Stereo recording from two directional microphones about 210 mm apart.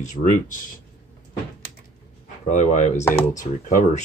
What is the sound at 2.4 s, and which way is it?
Speech, 35° left (ahead or behind).